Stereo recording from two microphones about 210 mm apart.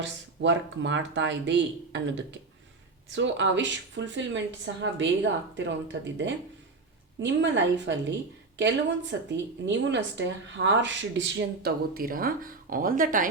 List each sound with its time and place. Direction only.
0.0 s a woman's voice: 60° right (ahead or behind)
11.3 s speech: 45° right (ahead or behind)